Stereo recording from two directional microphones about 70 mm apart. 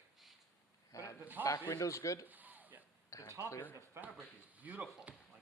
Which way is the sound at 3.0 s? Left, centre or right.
Left.